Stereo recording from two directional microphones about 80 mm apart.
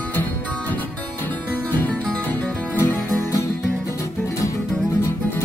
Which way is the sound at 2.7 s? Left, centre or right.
Left.